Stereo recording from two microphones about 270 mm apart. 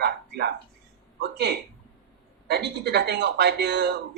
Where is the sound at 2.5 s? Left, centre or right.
Right.